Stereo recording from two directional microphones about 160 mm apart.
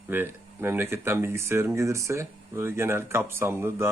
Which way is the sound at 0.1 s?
15° right (ahead or behind).